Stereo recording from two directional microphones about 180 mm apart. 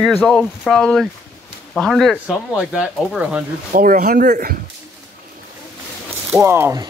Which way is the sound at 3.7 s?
50° right (ahead or behind).